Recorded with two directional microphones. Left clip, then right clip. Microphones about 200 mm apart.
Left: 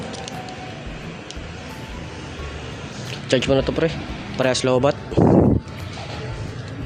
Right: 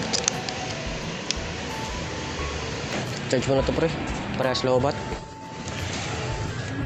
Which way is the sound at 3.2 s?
40° left (ahead or behind).